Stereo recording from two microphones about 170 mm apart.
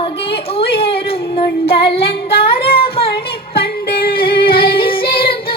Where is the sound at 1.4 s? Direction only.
35° left (ahead or behind).